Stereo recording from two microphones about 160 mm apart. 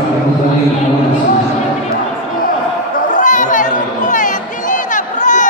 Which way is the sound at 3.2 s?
55° left (ahead or behind).